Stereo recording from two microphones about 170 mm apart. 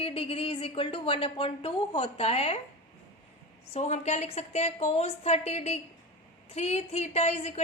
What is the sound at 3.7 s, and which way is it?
A woman's voice, 40° left (ahead or behind).